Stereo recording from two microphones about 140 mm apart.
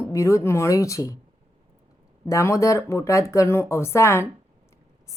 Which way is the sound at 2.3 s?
20° left (ahead or behind).